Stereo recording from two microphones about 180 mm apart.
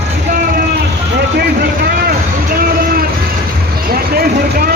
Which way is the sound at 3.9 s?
55° right (ahead or behind).